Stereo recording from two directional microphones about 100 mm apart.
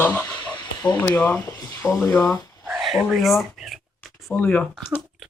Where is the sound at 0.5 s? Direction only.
45° left (ahead or behind).